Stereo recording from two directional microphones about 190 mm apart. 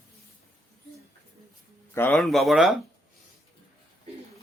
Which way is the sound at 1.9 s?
5° left (ahead or behind).